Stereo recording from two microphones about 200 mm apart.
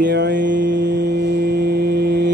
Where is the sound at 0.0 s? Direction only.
60° right (ahead or behind).